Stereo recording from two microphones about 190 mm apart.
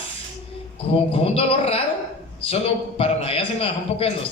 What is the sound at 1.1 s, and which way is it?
A man's voice, 30° left (ahead or behind).